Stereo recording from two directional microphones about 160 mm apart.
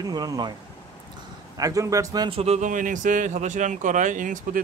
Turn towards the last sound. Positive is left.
turn(degrees=-55)  # may be behind; listen again after turning